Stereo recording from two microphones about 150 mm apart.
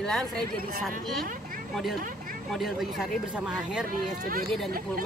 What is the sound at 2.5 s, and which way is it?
Speech, centre (ahead or behind).